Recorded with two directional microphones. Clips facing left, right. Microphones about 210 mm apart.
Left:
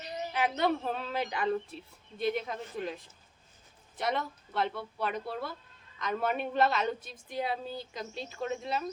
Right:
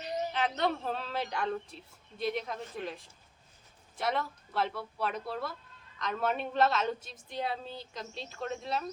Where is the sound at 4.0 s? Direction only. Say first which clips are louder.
Even; centre (ahead or behind).